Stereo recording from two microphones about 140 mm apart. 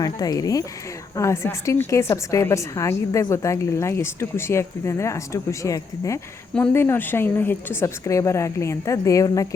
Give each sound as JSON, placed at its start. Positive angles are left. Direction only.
{"t": 0.0, "sound": "a woman's voice", "side_deg": 25}